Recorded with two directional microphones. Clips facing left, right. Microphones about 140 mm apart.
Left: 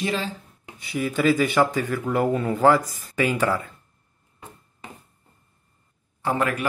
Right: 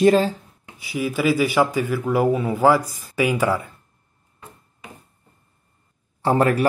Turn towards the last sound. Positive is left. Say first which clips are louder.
# right 6 dB
turn(degrees=-35)  # may be behind; listen again after turning